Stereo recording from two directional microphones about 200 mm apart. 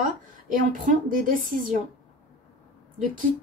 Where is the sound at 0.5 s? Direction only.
40° right (ahead or behind).